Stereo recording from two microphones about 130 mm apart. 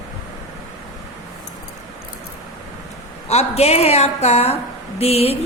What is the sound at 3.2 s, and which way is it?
A woman's voice, 55° left (ahead or behind).